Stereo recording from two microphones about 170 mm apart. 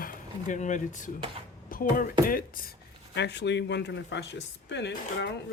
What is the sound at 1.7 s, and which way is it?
Speech, 60° left (ahead or behind).